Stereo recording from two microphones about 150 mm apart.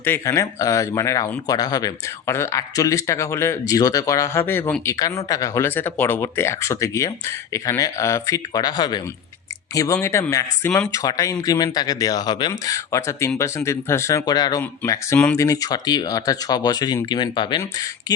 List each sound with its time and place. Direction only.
0.0 s speech: 15° left (ahead or behind)